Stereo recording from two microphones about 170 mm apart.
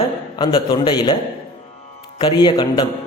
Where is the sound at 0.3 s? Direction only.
25° left (ahead or behind).